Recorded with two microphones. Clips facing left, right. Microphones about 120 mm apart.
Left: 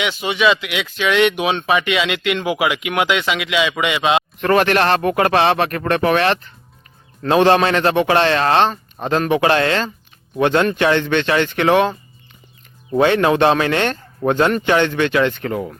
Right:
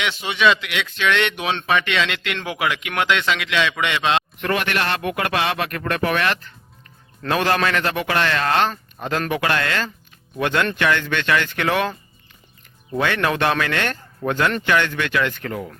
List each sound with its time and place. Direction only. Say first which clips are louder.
0.0 s speech: left 2 dB; centre (ahead or behind)
4.4 s speech: left 8 dB; 35° left (ahead or behind)